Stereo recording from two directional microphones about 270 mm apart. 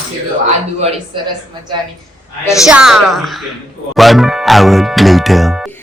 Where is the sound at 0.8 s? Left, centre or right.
Centre.